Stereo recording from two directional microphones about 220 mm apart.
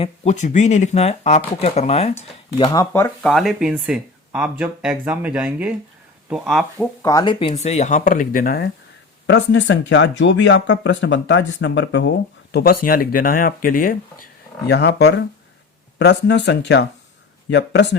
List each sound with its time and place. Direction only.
0.0 s speech: 30° left (ahead or behind)
3.2 s speech: centre (ahead or behind)
7.0 s speech: 15° left (ahead or behind); by 8.7 s 40° left (ahead or behind)
9.2 s speech: 55° left (ahead or behind)
12.5 s speech: 45° left (ahead or behind)